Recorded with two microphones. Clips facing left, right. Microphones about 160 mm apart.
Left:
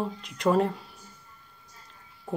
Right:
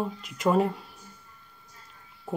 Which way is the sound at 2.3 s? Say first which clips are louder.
Even; 5° right (ahead or behind).